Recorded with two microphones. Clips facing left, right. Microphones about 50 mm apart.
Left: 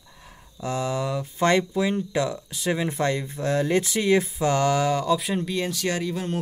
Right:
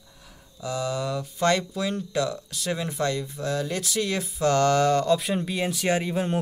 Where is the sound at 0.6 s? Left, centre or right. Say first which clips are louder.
Left 2 dB; left.